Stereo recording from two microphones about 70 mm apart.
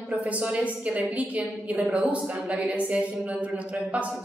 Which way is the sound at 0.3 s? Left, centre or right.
Centre.